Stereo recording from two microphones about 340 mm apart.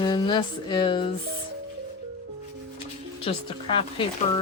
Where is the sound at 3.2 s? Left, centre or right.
Centre.